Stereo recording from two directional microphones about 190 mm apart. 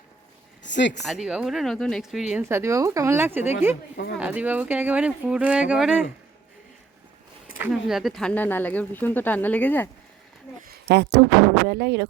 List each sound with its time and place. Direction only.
0.6 s speech: 70° left (ahead or behind)
1.0 s speech: centre (ahead or behind)
2.3 s speech: 15° right (ahead or behind)
7.6 s speech: 5° right (ahead or behind)
10.7 s a sound: 60° right (ahead or behind)
11.7 s speech: 60° right (ahead or behind)